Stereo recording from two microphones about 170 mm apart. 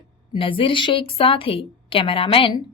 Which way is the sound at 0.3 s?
30° left (ahead or behind).